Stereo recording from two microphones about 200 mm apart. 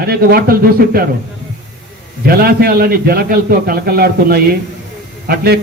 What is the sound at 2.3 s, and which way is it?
A man's voice, 50° right (ahead or behind).